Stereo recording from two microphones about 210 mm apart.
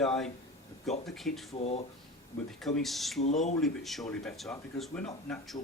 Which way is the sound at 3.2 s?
35° left (ahead or behind).